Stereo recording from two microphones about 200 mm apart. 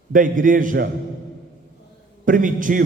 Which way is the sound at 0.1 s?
40° right (ahead or behind).